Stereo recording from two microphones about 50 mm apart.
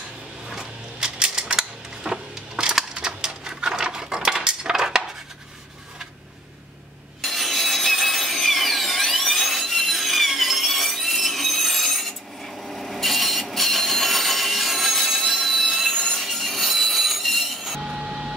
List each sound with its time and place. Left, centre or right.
0.5 s a sound: centre
7.2 s sawing: centre
17.8 s vehicle: centre